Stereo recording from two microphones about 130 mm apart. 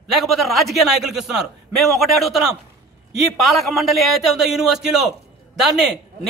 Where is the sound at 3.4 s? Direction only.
Centre (ahead or behind).